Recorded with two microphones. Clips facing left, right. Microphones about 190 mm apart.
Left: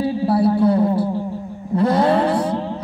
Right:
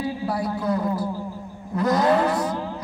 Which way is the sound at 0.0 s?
30° left (ahead or behind).